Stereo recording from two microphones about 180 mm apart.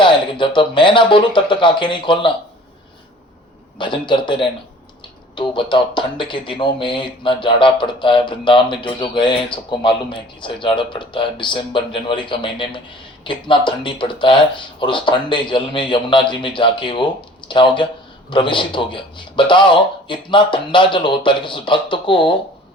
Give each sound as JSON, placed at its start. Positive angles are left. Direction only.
{"t": 0.0, "sound": "speech", "side_deg": 25}
{"t": 3.8, "sound": "speech", "side_deg": 25}